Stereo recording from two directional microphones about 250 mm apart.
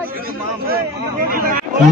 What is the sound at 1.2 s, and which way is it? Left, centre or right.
Speech, right.